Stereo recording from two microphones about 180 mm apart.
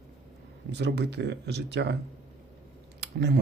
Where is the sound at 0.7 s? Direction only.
70° right (ahead or behind).